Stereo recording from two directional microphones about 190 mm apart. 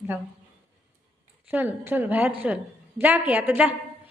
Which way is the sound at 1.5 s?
10° right (ahead or behind).